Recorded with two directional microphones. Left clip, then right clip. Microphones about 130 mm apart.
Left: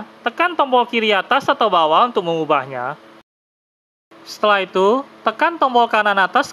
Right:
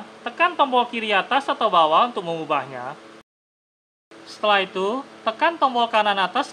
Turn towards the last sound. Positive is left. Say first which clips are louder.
# left 5 dB
turn(degrees=50)  # may be behind; listen again after turning